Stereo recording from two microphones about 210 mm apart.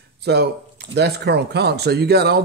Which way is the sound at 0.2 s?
50° right (ahead or behind).